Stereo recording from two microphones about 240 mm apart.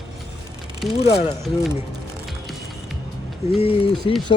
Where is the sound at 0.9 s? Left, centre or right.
Left.